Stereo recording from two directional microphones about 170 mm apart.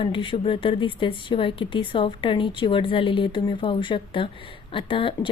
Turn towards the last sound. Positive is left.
turn(degrees=30)  # may be behind; listen again after turning